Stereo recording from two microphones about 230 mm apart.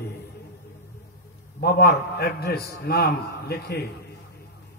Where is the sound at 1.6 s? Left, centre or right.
Left.